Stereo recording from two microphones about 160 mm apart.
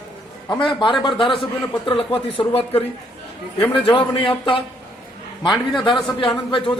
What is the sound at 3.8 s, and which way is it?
Speech, 30° left (ahead or behind).